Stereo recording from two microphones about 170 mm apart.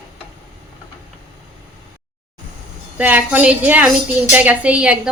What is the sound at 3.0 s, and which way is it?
A woman's voice, 10° right (ahead or behind).